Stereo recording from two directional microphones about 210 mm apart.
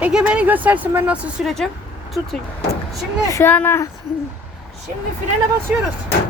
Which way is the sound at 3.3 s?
10° left (ahead or behind).